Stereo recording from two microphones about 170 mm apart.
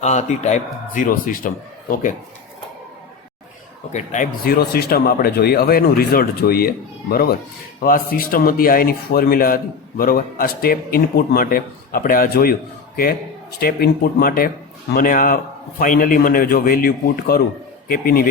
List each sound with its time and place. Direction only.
0.0 s a man's voice: 45° left (ahead or behind)
3.9 s speech: 50° left (ahead or behind)
13.6 s speech: 60° left (ahead or behind)